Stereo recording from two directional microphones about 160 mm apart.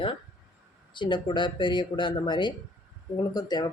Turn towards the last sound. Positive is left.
turn(degrees=25)  # may be behind; listen again after turning